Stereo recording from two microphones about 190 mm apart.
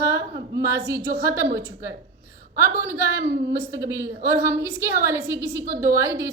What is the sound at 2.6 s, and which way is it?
A woman's voice, 15° right (ahead or behind).